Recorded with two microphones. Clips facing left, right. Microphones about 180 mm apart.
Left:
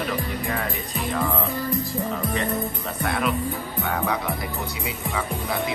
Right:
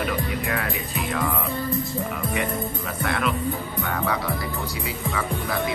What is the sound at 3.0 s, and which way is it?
Music, centre (ahead or behind).